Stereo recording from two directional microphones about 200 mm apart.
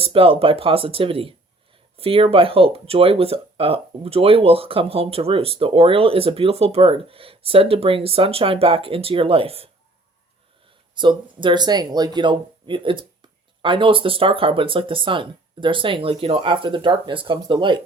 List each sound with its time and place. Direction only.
0.0 s speech: 25° right (ahead or behind)
10.9 s speech: 25° right (ahead or behind)